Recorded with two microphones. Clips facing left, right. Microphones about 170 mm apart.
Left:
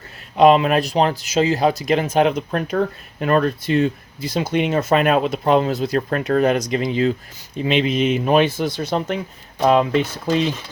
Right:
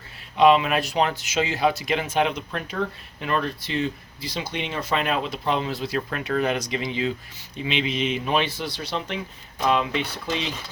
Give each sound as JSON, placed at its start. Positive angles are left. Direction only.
{"t": 0.3, "sound": "speech", "side_deg": 45}